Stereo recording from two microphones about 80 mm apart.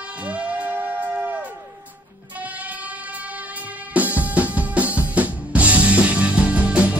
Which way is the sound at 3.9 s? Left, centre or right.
Right.